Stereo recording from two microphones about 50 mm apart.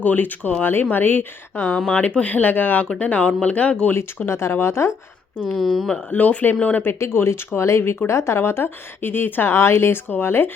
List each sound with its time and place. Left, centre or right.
0.0 s speech: left
2.0 s speech: left
3.0 s speech: left
4.3 s speech: left
5.5 s speech: centre
6.1 s speech: left
7.0 s speech: left
9.6 s speech: left
10.1 s speech: left